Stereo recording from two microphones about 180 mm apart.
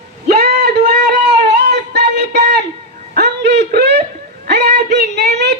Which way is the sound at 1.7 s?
70° right (ahead or behind).